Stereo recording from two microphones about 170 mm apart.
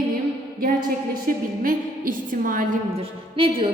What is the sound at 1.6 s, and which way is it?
A woman's voice, 55° right (ahead or behind).